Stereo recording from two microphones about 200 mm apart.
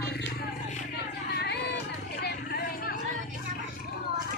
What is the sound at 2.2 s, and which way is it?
Vehicle, 50° left (ahead or behind).